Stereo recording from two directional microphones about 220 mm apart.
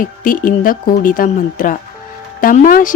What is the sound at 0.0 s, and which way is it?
Music, 40° left (ahead or behind).